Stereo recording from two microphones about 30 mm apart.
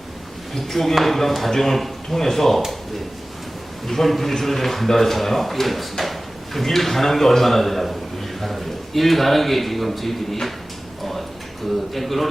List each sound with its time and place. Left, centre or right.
0.5 s a man's voice: centre
3.8 s a man's voice: centre
11.9 s a man's voice: centre